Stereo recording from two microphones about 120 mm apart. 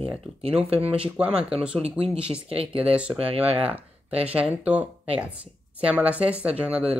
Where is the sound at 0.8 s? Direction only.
10° right (ahead or behind).